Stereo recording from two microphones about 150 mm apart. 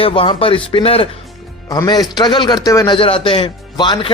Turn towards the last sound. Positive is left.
turn(degrees=30)  # may be behind; listen again after turning